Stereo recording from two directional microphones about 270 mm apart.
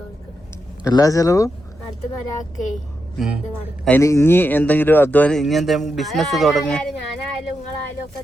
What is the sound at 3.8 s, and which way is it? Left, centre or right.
Speech, centre.